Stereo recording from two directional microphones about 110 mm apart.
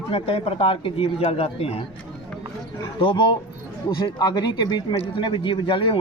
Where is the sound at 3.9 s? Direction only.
40° left (ahead or behind).